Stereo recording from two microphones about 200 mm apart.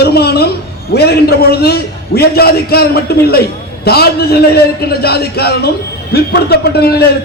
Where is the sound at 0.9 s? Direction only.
55° left (ahead or behind).